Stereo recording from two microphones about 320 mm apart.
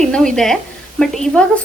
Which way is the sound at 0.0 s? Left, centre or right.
Centre.